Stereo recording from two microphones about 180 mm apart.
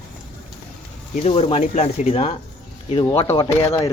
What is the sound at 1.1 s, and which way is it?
Speech, 35° left (ahead or behind).